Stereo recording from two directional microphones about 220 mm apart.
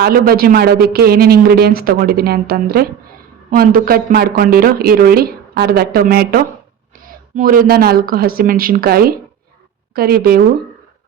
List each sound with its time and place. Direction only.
0.0 s a woman's voice: 45° right (ahead or behind)